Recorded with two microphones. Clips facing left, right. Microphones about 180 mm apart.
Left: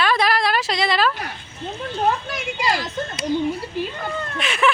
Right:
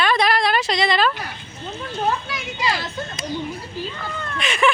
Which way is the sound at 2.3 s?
40° left (ahead or behind).